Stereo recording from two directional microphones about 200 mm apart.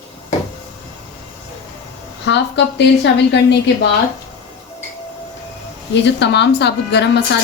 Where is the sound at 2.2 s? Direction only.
60° left (ahead or behind).